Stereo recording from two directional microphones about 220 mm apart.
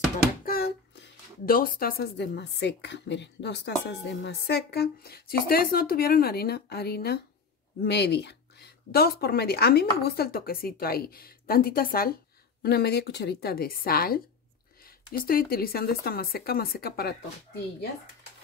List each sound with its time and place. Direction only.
0.5 s a woman's voice: 45° left (ahead or behind)